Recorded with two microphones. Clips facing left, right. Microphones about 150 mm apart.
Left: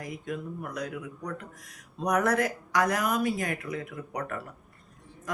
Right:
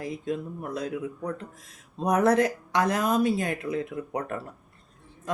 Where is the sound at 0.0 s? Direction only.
25° right (ahead or behind).